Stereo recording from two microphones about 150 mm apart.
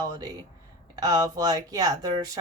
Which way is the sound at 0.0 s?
25° right (ahead or behind).